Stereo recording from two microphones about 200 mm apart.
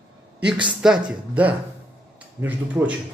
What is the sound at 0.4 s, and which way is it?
Speech, 5° right (ahead or behind).